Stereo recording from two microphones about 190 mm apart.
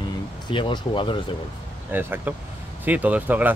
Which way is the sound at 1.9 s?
10° right (ahead or behind).